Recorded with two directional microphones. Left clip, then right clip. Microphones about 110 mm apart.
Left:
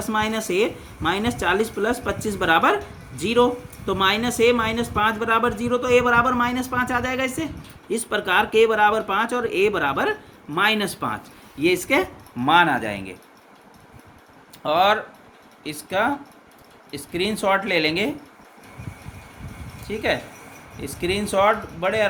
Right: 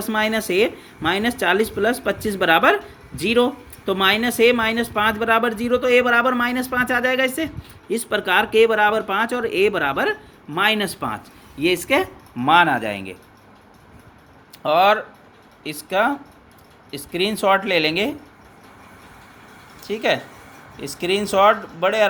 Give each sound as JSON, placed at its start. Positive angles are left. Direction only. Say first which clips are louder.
{"t": 0.0, "sound": "speech", "louder": "right 2 dB", "side_deg": -40}
{"t": 14.6, "sound": "speech", "louder": "right 3 dB", "side_deg": -40}
{"t": 19.9, "sound": "speech", "louder": "right 3 dB", "side_deg": -50}